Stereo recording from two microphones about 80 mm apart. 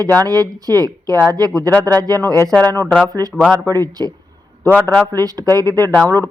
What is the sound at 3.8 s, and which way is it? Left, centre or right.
Speech, right.